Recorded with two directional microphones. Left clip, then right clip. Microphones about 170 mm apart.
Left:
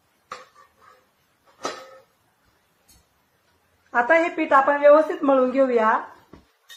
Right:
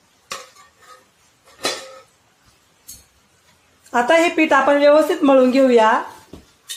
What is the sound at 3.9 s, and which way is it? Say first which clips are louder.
Speech: right 4 dB; 55° right (ahead or behind).